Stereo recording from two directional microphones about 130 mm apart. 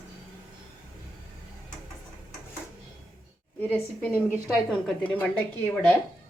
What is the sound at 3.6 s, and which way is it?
A woman's voice, 15° left (ahead or behind).